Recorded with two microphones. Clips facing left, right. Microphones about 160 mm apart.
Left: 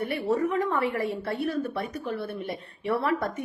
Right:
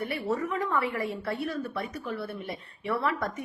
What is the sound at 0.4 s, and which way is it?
A woman's voice, 45° left (ahead or behind).